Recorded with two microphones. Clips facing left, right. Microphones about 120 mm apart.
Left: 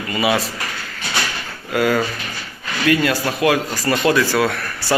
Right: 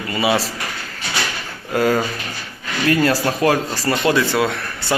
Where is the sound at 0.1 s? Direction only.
25° right (ahead or behind).